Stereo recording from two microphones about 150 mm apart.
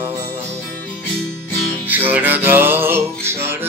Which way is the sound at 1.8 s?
10° right (ahead or behind).